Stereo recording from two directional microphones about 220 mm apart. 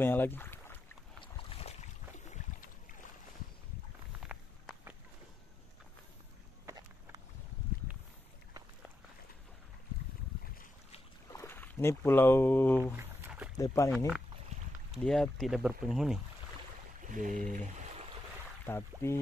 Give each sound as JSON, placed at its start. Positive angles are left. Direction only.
{"t": 0.0, "sound": "speech", "side_deg": 10}
{"t": 1.2, "sound": "boat", "side_deg": 25}
{"t": 4.3, "sound": "walk", "side_deg": -5}
{"t": 11.2, "sound": "speech", "side_deg": 10}
{"t": 12.9, "sound": "a sound", "side_deg": -5}
{"t": 13.6, "sound": "speech", "side_deg": 15}
{"t": 13.9, "sound": "speech", "side_deg": -5}
{"t": 17.0, "sound": "speech", "side_deg": -35}
{"t": 18.7, "sound": "speech", "side_deg": 10}